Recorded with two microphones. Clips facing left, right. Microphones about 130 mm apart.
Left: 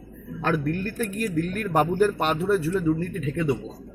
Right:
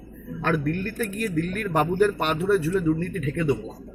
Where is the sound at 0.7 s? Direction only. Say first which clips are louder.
Even; 35° left (ahead or behind).